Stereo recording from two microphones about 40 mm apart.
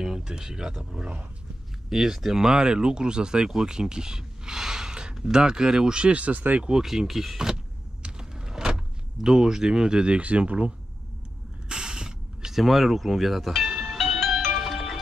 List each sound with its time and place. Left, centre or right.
0.0 s speech: centre
1.9 s speech: centre; by 6.6 s right
6.7 s speech: centre
8.0 s power windows: centre; by 10.7 s right
11.7 s mechanisms: centre
12.5 s speech: centre
13.7 s music: centre